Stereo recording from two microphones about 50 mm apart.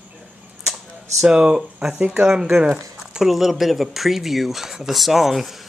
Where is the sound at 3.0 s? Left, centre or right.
Centre.